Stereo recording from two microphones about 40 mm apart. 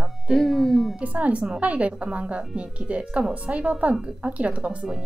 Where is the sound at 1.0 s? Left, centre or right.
Right.